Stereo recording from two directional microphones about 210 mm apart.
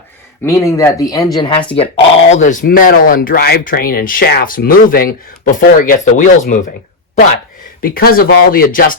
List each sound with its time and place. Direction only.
0.4 s speech: 15° left (ahead or behind)
2.3 s speech: 40° left (ahead or behind)
7.8 s speech: 45° left (ahead or behind)